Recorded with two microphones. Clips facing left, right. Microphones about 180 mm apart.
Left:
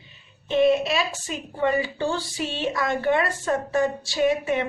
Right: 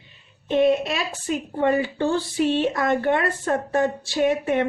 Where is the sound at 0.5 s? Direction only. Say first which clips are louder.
Even; 55° right (ahead or behind).